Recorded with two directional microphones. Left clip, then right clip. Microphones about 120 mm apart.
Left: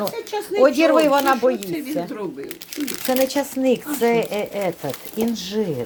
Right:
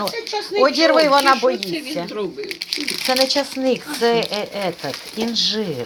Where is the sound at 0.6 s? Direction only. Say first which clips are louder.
Right 1 dB; 45° left (ahead or behind).